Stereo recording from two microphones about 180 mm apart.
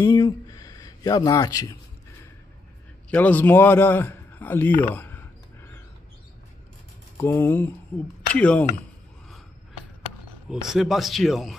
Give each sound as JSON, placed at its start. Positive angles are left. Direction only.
{"t": 0.0, "sound": "speech", "side_deg": 20}
{"t": 3.1, "sound": "a man's voice", "side_deg": 10}
{"t": 4.9, "sound": "a sound", "side_deg": 10}
{"t": 7.2, "sound": "a man's voice", "side_deg": 10}
{"t": 10.5, "sound": "speech", "side_deg": 0}